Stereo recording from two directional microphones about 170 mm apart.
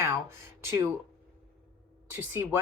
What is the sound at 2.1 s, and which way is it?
Speech, 10° right (ahead or behind).